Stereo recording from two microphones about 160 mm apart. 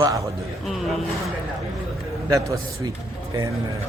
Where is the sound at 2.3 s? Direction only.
20° right (ahead or behind).